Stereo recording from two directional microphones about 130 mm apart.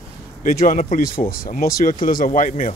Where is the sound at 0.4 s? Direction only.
90° left.